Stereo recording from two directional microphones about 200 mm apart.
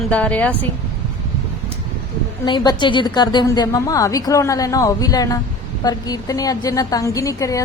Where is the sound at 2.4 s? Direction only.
20° left (ahead or behind).